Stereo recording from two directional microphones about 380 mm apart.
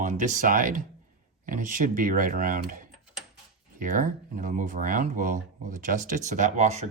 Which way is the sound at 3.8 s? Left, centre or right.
Right.